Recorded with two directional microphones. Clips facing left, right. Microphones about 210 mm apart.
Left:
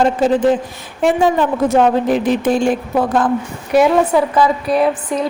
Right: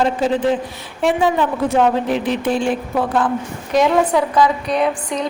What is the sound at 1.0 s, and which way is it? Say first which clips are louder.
A woman's voice: left 3 dB; 45° left (ahead or behind).